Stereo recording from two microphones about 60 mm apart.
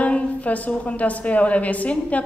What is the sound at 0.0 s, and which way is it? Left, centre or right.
A woman's voice, left.